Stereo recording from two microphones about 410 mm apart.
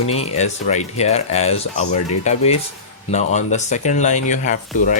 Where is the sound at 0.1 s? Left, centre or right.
Centre.